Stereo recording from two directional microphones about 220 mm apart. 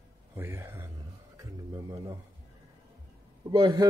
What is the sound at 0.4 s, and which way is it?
A man's voice, 10° right (ahead or behind).